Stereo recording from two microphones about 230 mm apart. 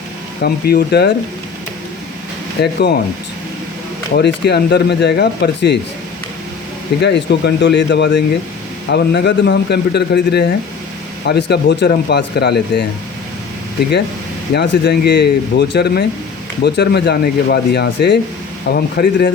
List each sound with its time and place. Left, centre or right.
0.4 s speech: left
2.6 s speech: left
4.1 s speech: left
7.0 s speech: left
14.5 s speech: left